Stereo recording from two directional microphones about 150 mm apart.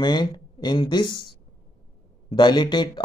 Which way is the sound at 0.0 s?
30° left (ahead or behind).